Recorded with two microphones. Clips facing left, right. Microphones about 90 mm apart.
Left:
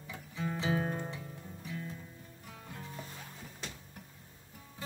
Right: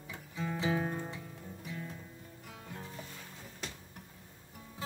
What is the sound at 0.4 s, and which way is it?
Music, centre (ahead or behind).